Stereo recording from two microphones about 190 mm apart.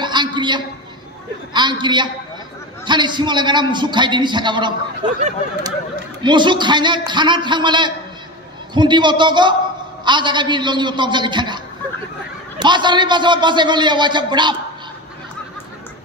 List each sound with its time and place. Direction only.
0.0 s a sound: 25° right (ahead or behind)
1.5 s a man's voice: 25° right (ahead or behind)
6.2 s a man's voice: 25° right (ahead or behind)